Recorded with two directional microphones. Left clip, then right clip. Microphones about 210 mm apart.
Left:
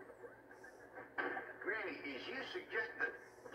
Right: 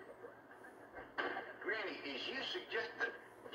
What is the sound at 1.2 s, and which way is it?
Speech, 25° right (ahead or behind).